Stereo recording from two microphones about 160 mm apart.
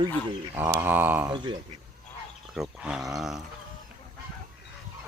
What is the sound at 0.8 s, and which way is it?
Speech, 10° right (ahead or behind).